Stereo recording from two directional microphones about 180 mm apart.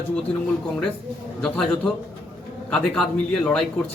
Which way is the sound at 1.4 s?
5° left (ahead or behind).